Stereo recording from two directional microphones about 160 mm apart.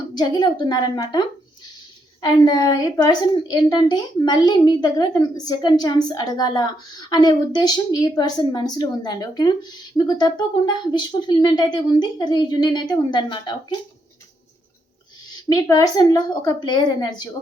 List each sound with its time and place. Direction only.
0.1 s a woman's voice: 25° left (ahead or behind)
15.4 s a woman's voice: 20° left (ahead or behind)